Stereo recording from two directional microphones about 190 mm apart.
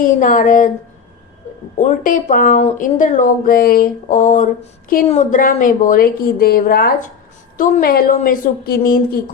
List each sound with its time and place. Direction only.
0.0 s speech: 45° left (ahead or behind)
1.8 s speech: 40° left (ahead or behind)